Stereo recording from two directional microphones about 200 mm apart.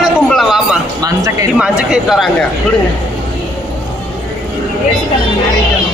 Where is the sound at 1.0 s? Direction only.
15° right (ahead or behind).